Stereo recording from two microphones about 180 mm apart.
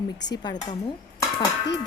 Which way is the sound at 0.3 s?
25° left (ahead or behind).